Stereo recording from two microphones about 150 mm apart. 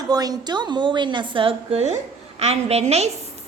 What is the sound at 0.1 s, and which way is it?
A woman's voice, 25° right (ahead or behind).